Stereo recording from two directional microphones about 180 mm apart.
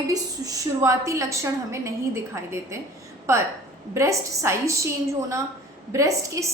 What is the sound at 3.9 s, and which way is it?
A woman's voice, 15° right (ahead or behind).